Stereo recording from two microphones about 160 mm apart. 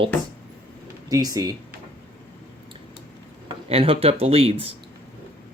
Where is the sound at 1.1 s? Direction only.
20° right (ahead or behind).